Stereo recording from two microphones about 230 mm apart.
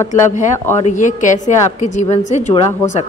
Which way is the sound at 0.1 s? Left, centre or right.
Left.